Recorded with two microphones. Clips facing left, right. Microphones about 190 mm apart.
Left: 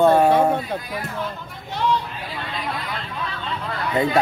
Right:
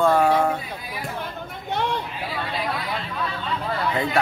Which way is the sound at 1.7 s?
55° right (ahead or behind).